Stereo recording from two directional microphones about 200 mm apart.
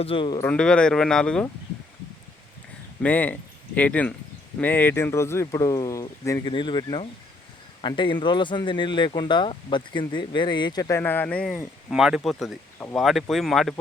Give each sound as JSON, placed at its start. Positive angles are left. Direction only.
{"t": 0.0, "sound": "speech", "side_deg": 25}
{"t": 0.4, "sound": "speech", "side_deg": 5}
{"t": 3.0, "sound": "speech", "side_deg": 5}